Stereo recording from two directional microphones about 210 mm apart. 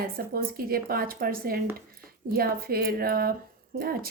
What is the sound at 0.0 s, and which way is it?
Speech, 45° right (ahead or behind).